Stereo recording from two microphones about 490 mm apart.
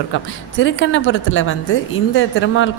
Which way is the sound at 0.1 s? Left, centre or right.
Left.